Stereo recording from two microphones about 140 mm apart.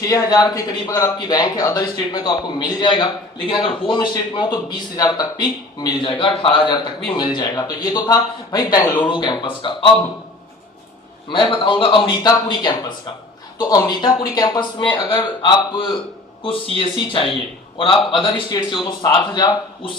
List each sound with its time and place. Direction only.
0.1 s a man's voice: 30° left (ahead or behind)
11.3 s a man's voice: 35° left (ahead or behind)